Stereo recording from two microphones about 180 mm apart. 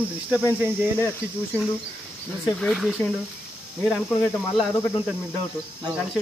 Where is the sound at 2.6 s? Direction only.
Centre (ahead or behind).